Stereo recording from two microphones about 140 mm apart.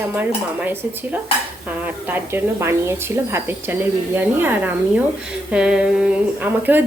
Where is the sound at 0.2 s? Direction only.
15° right (ahead or behind).